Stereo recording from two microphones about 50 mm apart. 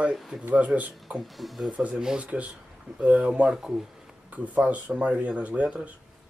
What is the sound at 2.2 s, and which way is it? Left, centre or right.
Speech, right.